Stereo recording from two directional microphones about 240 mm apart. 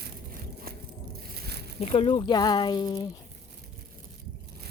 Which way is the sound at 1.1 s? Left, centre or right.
Right.